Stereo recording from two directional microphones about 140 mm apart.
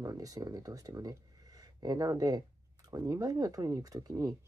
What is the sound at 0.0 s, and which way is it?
Speech, 25° right (ahead or behind).